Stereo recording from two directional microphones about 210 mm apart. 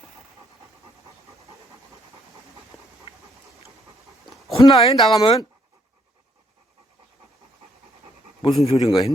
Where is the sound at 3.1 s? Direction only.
25° left (ahead or behind).